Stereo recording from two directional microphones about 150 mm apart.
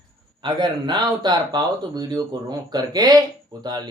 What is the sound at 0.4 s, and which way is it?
Speech, 30° right (ahead or behind).